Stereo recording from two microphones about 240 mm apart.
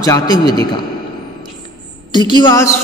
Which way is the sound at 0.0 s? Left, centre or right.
Centre.